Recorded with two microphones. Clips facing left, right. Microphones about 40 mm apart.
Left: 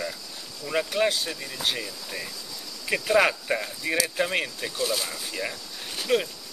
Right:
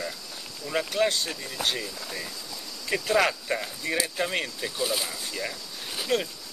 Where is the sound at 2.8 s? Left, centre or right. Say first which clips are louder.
Left 2 dB; centre.